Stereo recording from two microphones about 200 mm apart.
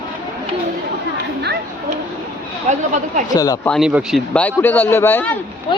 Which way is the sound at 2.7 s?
35° right (ahead or behind).